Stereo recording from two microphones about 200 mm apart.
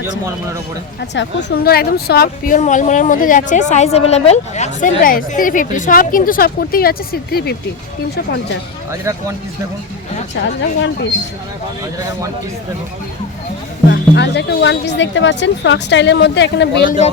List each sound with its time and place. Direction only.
1.1 s a woman's voice: 60° left (ahead or behind)
8.9 s speech: 15° right (ahead or behind)
10.4 s speech: 60° left (ahead or behind)
13.9 s speech: 60° left (ahead or behind)
16.8 s a man's voice: 40° left (ahead or behind)